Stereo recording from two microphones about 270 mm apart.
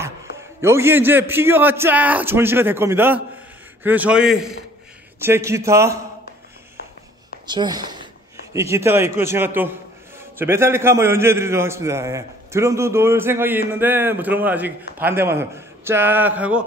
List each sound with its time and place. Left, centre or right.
0.0 s a man's voice: centre
7.4 s a man's voice: centre